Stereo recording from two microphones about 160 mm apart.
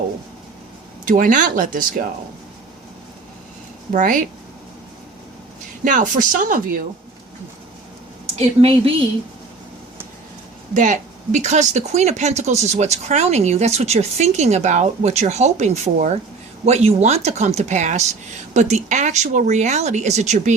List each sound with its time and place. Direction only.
1.0 s speech: 55° right (ahead or behind)
3.9 s speech: 55° right (ahead or behind)
5.8 s speech: 55° right (ahead or behind)
8.4 s speech: 35° right (ahead or behind)
10.8 s speech: 50° right (ahead or behind)